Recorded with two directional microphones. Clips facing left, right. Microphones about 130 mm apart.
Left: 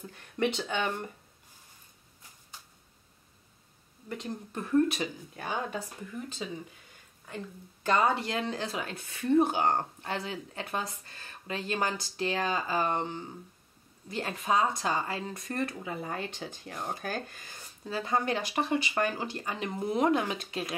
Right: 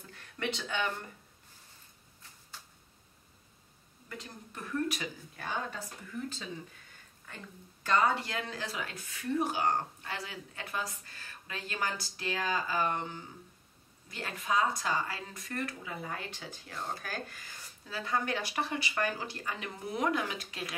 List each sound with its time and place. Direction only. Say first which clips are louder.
0.1 s speech: left 7 dB; 20° left (ahead or behind)
4.1 s speech: left 9 dB; 25° left (ahead or behind)
7.8 s speech: left 2 dB; 25° left (ahead or behind)
16.7 s speech: left 3 dB; 15° left (ahead or behind)